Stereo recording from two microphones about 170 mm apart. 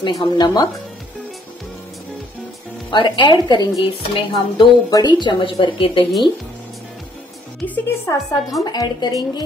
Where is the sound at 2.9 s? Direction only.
25° left (ahead or behind).